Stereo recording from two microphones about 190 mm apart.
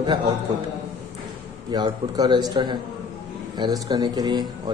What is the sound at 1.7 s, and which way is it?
Speech, 20° right (ahead or behind).